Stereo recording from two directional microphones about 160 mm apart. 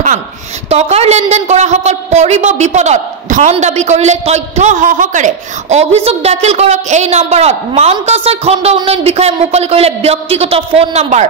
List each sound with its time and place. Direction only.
0.7 s a man's voice: 40° right (ahead or behind)